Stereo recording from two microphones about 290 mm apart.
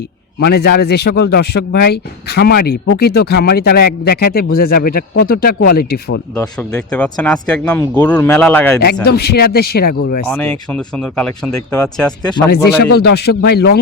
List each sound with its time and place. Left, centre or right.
0.3 s a man's voice: left
6.3 s speech: centre
9.0 s a man's voice: left
10.3 s speech: centre
12.8 s a man's voice: left